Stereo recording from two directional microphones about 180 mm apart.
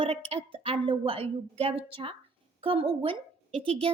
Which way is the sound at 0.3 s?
30° right (ahead or behind).